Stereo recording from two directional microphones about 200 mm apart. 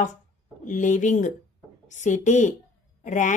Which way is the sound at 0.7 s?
40° left (ahead or behind).